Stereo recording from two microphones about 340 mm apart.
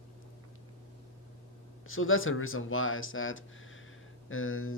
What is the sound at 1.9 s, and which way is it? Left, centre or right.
Speech, left.